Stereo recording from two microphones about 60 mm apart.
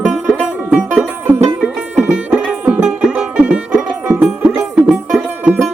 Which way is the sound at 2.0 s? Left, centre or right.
Centre.